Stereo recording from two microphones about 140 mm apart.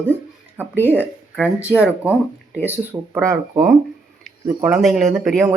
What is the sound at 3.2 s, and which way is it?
Speech, 20° right (ahead or behind).